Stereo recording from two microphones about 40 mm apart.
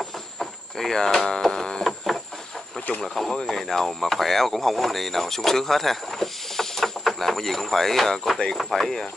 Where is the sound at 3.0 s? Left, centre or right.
Centre.